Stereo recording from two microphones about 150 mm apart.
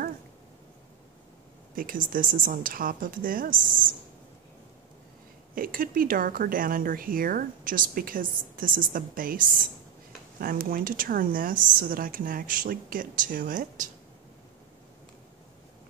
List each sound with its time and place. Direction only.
1.8 s speech: 70° right (ahead or behind)
5.5 s speech: 70° right (ahead or behind)